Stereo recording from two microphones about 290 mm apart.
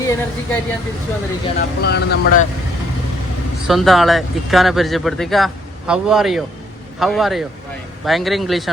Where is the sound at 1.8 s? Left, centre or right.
Left.